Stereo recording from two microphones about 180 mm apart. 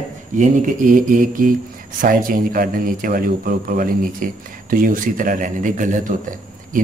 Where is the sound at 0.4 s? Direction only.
45° right (ahead or behind).